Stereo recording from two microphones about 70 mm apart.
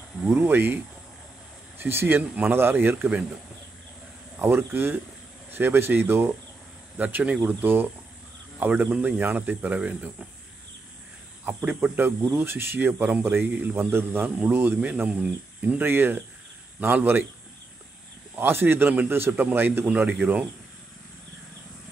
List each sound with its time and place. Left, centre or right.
0.3 s speech: right
1.8 s speech: right
4.4 s speech: right
11.4 s speech: right
14.8 s speech: right
15.8 s speech: right
18.4 s speech: right